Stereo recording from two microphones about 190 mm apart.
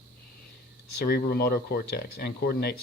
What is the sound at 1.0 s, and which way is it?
Speech, 55° left (ahead or behind).